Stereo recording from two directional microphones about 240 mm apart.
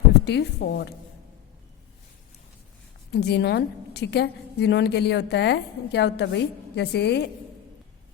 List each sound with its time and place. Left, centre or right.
0.3 s a woman's voice: left
3.1 s a woman's voice: left